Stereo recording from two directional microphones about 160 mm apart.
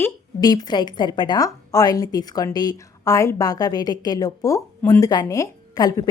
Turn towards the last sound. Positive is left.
turn(degrees=25)  # may be behind; listen again after turning